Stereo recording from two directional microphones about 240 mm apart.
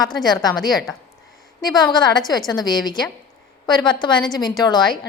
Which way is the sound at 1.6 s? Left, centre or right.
Centre.